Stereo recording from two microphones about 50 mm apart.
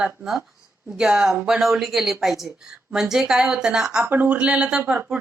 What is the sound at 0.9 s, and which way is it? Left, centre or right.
Speech, centre.